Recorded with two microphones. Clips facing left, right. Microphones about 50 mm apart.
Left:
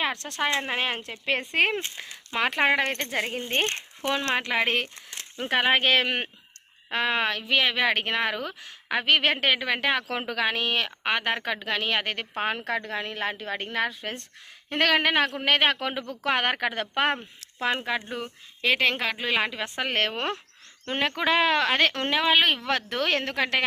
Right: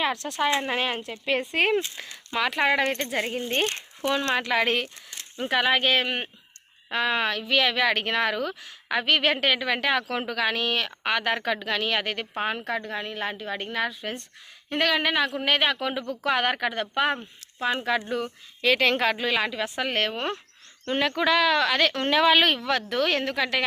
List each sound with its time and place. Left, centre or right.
0.0 s speech: left
2.0 s speech: centre
2.4 s speech: left
4.4 s speech: centre
5.1 s speech: left
5.8 s a woman's voice: left
6.9 s speech: left
12.4 s a woman's voice: left
17.7 s speech: left
22.1 s speech: centre
22.6 s speech: left